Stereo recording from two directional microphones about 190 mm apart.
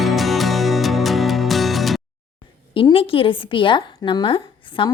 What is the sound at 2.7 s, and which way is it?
A woman's voice, 30° left (ahead or behind).